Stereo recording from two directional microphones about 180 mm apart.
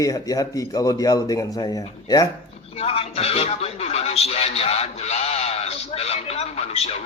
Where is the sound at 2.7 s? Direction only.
35° left (ahead or behind).